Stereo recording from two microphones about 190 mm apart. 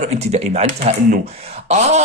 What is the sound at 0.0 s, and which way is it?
Speech, 35° right (ahead or behind).